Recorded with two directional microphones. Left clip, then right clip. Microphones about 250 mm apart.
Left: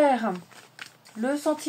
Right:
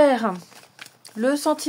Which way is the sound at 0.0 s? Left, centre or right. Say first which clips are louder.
Right 4 dB; right.